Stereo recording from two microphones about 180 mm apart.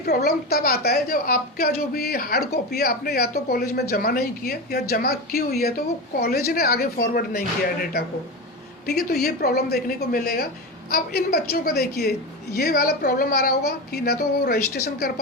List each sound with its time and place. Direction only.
0.0 s a woman's voice: 60° left (ahead or behind)
8.9 s a woman's voice: 60° left (ahead or behind)